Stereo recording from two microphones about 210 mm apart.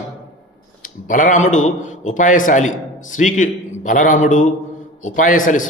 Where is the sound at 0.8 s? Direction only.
40° left (ahead or behind).